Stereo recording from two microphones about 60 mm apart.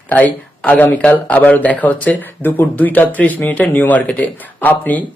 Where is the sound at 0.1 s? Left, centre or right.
Left.